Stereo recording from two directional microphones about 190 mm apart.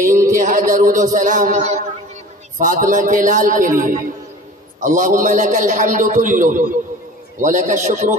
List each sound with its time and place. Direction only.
0.1 s mantra: 15° right (ahead or behind)
0.4 s a man's voice: 45° right (ahead or behind)